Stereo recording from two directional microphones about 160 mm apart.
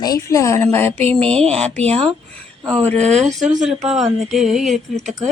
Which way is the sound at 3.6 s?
Centre (ahead or behind).